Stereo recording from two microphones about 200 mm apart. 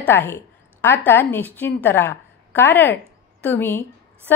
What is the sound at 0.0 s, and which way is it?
A woman's voice, 10° left (ahead or behind).